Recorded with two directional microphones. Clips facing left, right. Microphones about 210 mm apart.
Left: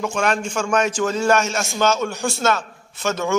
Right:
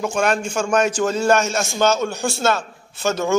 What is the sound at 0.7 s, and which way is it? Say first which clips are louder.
A man's voice: right 2 dB; 35° right (ahead or behind).